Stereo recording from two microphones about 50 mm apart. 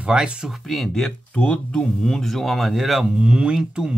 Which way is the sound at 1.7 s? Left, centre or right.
Centre.